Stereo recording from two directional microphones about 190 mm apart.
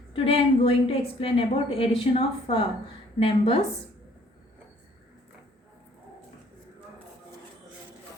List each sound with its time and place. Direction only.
0.1 s a woman's voice: 30° left (ahead or behind)